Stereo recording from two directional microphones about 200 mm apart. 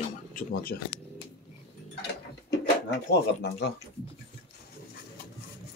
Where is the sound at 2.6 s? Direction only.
55° left (ahead or behind).